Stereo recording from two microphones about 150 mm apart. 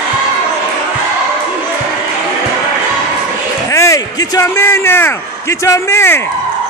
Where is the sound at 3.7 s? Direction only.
20° left (ahead or behind).